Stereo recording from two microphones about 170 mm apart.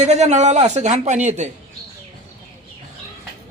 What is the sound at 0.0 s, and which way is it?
A man's voice, 40° right (ahead or behind).